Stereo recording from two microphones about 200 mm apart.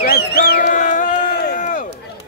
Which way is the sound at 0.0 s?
45° left (ahead or behind).